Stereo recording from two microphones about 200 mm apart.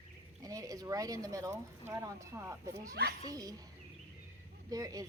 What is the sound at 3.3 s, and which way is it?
Speech, 20° right (ahead or behind).